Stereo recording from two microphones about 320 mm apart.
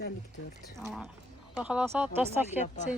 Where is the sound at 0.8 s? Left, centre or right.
Centre.